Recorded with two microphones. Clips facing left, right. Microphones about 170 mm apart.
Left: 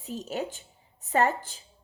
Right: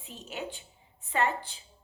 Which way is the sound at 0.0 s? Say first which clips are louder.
Left 6 dB; 40° left (ahead or behind).